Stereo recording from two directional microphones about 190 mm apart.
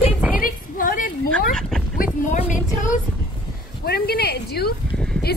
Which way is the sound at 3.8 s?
55° left (ahead or behind).